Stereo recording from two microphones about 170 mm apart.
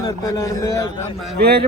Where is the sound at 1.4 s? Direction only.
70° right (ahead or behind).